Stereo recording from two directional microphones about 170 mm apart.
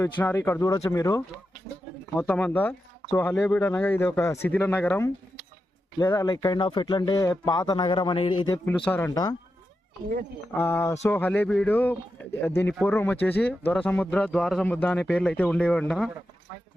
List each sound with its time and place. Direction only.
0.0 s speech: 15° left (ahead or behind)
6.0 s speech: 25° left (ahead or behind)
8.5 s speech: 10° left (ahead or behind)
10.6 s speech: 15° left (ahead or behind)